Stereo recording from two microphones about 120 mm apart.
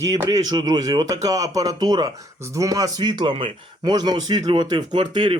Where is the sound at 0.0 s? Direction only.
35° right (ahead or behind).